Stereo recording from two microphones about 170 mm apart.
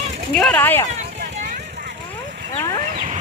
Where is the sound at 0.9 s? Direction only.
45° right (ahead or behind).